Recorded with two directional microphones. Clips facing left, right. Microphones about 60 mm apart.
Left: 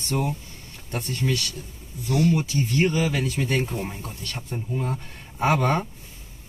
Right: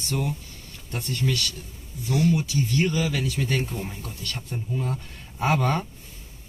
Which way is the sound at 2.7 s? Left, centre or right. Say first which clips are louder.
Left 3 dB; left.